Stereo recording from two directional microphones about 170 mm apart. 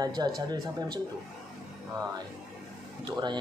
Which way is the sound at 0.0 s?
25° right (ahead or behind).